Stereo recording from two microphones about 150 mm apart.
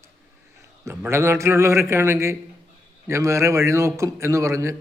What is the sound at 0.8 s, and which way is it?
A man's voice, 15° right (ahead or behind).